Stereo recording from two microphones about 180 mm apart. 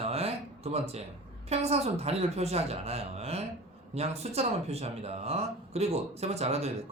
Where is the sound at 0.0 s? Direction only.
35° right (ahead or behind).